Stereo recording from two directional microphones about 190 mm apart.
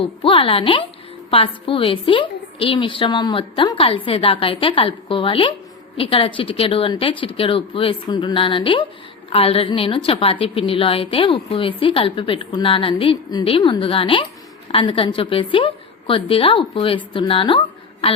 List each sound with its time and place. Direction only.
0.0 s a woman's voice: 25° left (ahead or behind)